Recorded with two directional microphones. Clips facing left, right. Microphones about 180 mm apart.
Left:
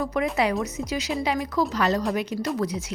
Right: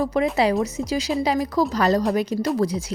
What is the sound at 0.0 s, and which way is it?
A woman's voice, 30° right (ahead or behind).